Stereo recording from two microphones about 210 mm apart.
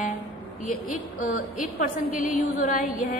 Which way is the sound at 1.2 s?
40° left (ahead or behind).